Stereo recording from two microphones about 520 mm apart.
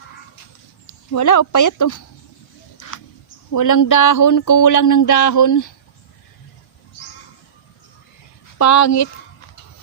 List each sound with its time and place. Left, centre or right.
1.1 s speech: left
2.7 s a sound: left
3.5 s speech: left
8.5 s speech: left